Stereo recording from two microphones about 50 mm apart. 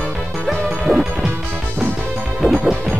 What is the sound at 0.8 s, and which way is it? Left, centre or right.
Music, centre.